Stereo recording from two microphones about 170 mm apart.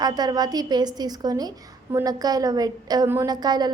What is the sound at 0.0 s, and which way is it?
A woman's voice, 25° right (ahead or behind).